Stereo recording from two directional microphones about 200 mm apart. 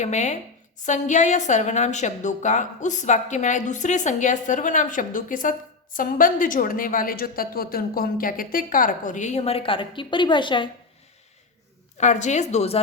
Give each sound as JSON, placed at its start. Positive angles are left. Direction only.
{"t": 0.0, "sound": "a woman's voice", "side_deg": 35}
{"t": 11.9, "sound": "a woman's voice", "side_deg": 35}